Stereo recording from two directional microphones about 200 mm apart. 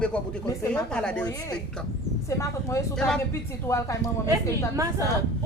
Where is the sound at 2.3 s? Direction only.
15° left (ahead or behind).